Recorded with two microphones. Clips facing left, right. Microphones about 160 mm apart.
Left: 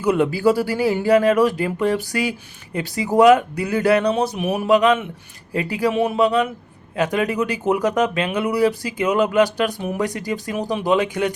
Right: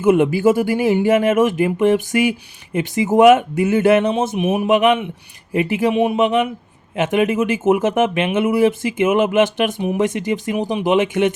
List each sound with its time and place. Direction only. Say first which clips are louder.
0.0 s speech: right 4 dB; 20° right (ahead or behind)